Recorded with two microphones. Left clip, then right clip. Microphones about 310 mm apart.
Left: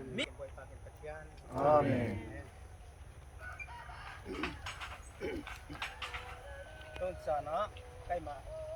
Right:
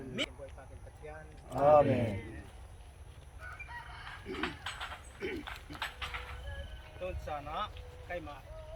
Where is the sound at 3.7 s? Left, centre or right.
Left.